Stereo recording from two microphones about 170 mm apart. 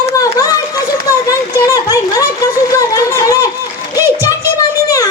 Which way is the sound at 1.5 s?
20° left (ahead or behind).